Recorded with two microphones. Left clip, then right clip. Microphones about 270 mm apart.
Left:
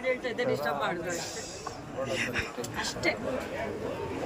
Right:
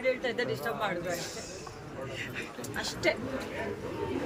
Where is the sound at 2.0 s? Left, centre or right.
Centre.